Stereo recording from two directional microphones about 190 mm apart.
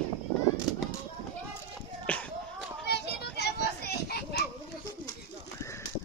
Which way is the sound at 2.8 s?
60° left (ahead or behind).